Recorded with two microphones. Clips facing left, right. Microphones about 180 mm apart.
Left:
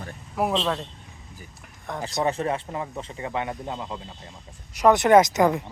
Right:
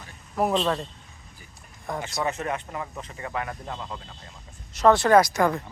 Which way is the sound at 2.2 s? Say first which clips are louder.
Left 5 dB; 30° left (ahead or behind).